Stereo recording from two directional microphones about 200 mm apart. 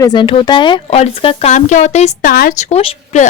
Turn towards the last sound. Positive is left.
turn(degrees=30)  # may be behind; listen again after turning